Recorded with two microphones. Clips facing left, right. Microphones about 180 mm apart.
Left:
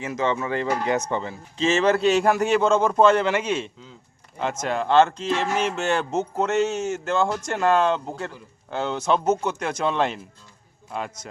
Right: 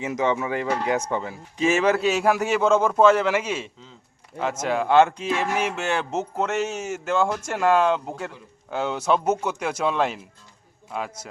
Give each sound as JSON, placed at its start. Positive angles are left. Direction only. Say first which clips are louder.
{"t": 0.0, "sound": "a man's voice", "louder": "right 1 dB", "side_deg": -15}